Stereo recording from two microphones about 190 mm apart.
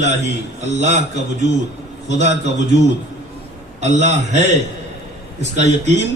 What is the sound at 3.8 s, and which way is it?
Speech, 35° right (ahead or behind).